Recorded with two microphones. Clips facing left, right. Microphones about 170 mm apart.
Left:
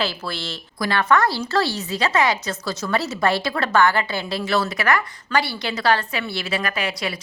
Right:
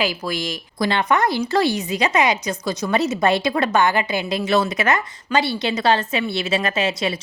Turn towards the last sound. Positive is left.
turn(degrees=-25)  # may be behind; listen again after turning